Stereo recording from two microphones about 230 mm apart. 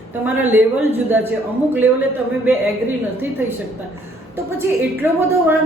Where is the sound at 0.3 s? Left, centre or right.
Centre.